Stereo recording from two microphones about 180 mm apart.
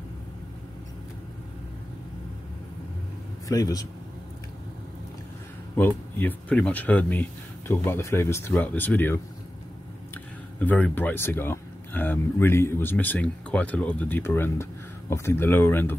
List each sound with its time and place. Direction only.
3.4 s speech: 20° left (ahead or behind)
5.8 s speech: 10° left (ahead or behind)